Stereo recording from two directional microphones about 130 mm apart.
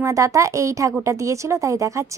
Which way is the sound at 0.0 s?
25° right (ahead or behind).